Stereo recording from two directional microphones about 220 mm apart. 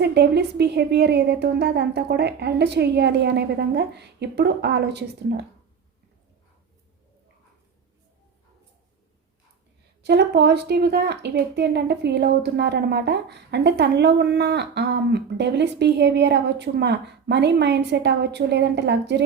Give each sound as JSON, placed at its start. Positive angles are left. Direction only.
{"t": 0.0, "sound": "a woman's voice", "side_deg": -50}
{"t": 10.0, "sound": "a woman's voice", "side_deg": -50}